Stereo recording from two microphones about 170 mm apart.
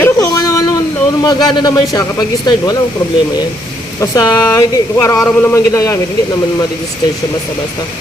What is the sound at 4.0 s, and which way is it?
Speech, 20° left (ahead or behind).